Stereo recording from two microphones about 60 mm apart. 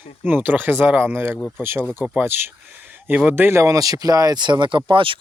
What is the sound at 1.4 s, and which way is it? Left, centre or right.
Speech, centre.